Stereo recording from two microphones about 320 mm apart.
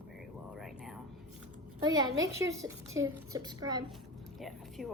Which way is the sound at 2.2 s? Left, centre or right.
Centre.